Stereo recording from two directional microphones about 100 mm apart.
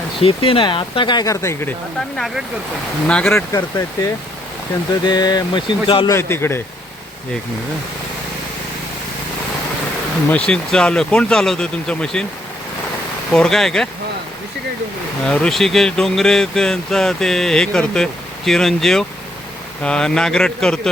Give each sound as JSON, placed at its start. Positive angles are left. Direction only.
{"t": 0.2, "sound": "speech", "side_deg": 65}
{"t": 1.2, "sound": "a man's voice", "side_deg": 30}
{"t": 2.1, "sound": "speech", "side_deg": 0}
{"t": 3.5, "sound": "speech", "side_deg": 35}
{"t": 6.1, "sound": "a man's voice", "side_deg": 25}
{"t": 10.2, "sound": "speech", "side_deg": 10}
{"t": 13.3, "sound": "speech", "side_deg": 5}
{"t": 15.3, "sound": "speech", "side_deg": 5}